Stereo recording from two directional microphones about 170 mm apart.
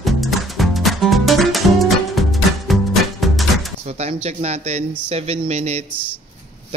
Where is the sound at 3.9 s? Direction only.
40° right (ahead or behind).